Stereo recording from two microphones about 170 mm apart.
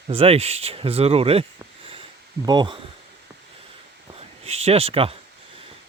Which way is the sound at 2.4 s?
25° right (ahead or behind).